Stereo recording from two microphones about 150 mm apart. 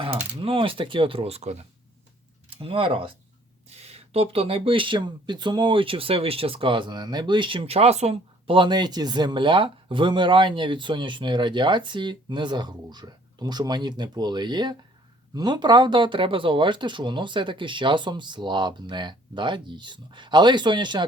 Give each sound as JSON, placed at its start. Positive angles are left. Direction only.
{"t": 0.0, "sound": "speech", "side_deg": -35}
{"t": 2.6, "sound": "speech", "side_deg": -40}